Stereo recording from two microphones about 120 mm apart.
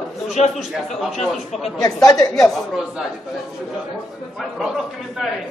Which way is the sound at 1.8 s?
30° left (ahead or behind).